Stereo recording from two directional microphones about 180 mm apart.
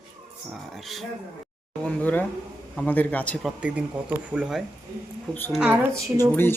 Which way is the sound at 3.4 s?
5° right (ahead or behind).